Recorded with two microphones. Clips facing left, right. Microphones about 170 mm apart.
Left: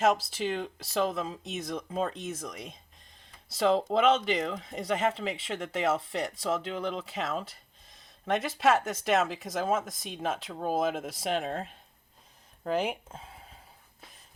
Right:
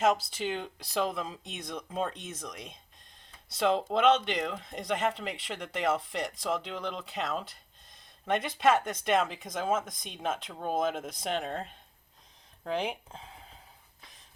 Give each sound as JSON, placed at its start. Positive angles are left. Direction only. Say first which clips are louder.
{"t": 0.0, "sound": "speech", "louder": "left 1 dB", "side_deg": 0}